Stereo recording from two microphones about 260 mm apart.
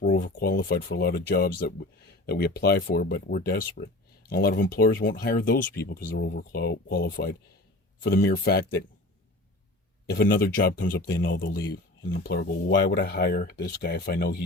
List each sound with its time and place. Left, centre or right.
0.1 s speech: left
10.1 s speech: left